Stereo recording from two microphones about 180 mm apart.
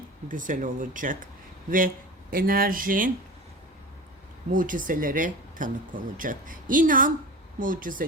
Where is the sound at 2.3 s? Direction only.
55° right (ahead or behind).